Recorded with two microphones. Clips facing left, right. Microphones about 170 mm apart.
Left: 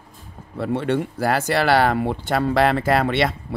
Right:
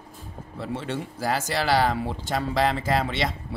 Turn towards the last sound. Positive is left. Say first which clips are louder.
# left 6 dB
turn(degrees=60)  # may be behind; listen again after turning